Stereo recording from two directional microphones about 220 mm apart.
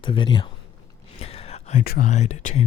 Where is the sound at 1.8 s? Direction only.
40° left (ahead or behind).